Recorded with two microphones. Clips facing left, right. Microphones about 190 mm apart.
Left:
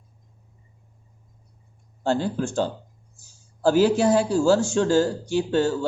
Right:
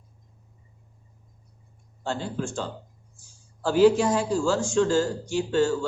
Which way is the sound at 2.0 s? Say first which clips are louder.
Left 6 dB; 35° left (ahead or behind).